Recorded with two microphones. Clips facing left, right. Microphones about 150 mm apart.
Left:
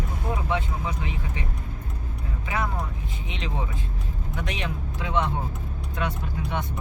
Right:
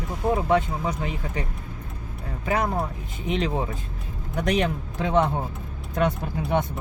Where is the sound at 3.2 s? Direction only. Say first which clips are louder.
Right 8 dB; 45° right (ahead or behind).